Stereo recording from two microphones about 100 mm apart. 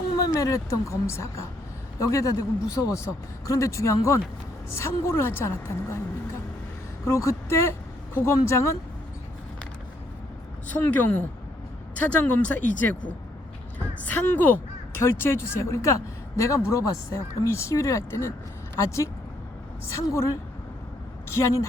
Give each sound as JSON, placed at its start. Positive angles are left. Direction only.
{"t": 0.3, "sound": "a man's voice", "side_deg": 35}
{"t": 10.7, "sound": "a man's voice", "side_deg": 15}
{"t": 21.2, "sound": "speech", "side_deg": 25}